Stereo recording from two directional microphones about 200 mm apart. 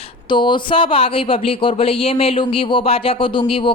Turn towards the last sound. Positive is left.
turn(degrees=25)  # may be behind; listen again after turning